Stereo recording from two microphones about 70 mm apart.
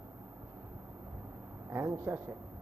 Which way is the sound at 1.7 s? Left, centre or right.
Right.